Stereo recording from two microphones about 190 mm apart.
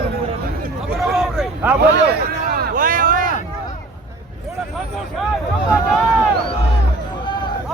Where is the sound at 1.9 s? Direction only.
55° right (ahead or behind).